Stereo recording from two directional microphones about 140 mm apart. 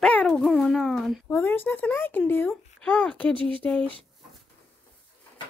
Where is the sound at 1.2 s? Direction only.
15° left (ahead or behind).